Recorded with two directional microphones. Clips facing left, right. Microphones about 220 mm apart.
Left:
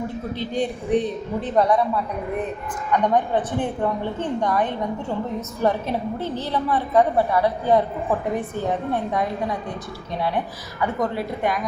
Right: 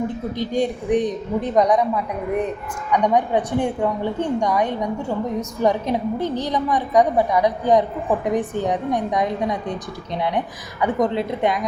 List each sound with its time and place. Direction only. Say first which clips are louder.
0.3 s a woman's voice: right 4 dB; 15° right (ahead or behind)
2.9 s a woman's voice: right 2 dB; 15° right (ahead or behind)